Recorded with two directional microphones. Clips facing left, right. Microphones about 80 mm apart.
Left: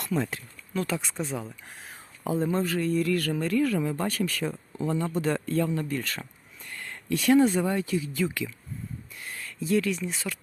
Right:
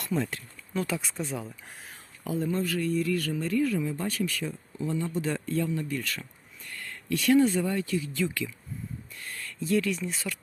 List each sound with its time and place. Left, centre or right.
0.0 s speech: centre
2.2 s speech: left
3.0 s speech: left; by 10.3 s centre